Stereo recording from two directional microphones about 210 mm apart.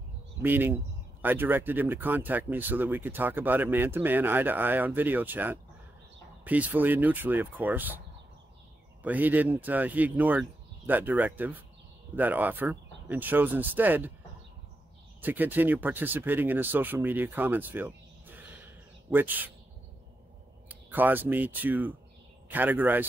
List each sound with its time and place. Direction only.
0.4 s speech: 10° right (ahead or behind)
9.0 s speech: 10° right (ahead or behind)
15.2 s speech: 10° right (ahead or behind)
20.6 s speech: 10° right (ahead or behind)